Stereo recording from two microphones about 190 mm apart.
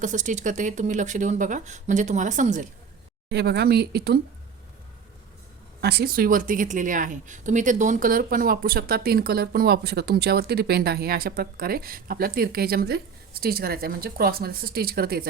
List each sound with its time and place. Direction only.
0.0 s speech: 40° right (ahead or behind)
3.2 s speech: 60° right (ahead or behind)
5.8 s a woman's voice: 60° right (ahead or behind)